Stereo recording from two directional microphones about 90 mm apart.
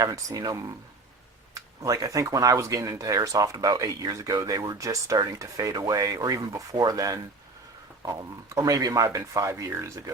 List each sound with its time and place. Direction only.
0.0 s speech: 40° right (ahead or behind)
8.5 s speech: 40° right (ahead or behind)